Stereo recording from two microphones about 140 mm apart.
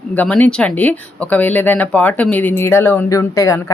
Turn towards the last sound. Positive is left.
turn(degrees=20)  # may be behind; listen again after turning